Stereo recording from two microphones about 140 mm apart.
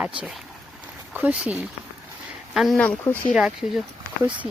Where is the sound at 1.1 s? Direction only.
10° right (ahead or behind).